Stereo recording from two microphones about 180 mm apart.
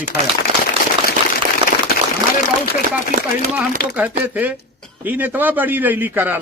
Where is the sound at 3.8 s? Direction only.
55° left (ahead or behind).